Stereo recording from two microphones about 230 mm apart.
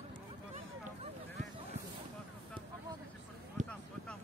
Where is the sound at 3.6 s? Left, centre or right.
Right.